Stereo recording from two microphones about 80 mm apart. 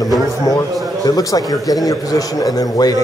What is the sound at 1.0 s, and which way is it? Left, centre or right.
A man's voice, left.